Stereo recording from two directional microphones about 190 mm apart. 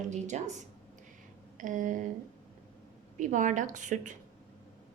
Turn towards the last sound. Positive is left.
turn(degrees=-40)  # may be behind; listen again after turning